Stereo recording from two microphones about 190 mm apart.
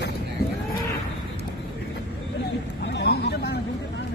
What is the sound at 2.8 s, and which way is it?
Vehicle, 60° left (ahead or behind).